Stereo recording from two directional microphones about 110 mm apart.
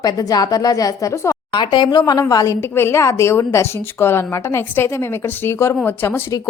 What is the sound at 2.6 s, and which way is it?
A woman's voice, 20° left (ahead or behind).